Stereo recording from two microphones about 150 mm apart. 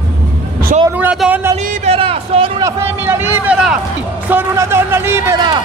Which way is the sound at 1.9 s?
40° right (ahead or behind).